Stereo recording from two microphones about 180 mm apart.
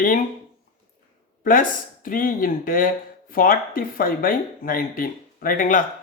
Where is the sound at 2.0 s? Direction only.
50° left (ahead or behind).